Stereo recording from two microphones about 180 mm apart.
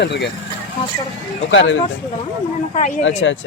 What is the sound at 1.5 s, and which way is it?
Speech, 90° left.